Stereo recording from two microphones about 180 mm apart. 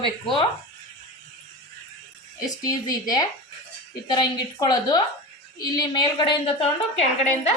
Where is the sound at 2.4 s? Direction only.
20° left (ahead or behind).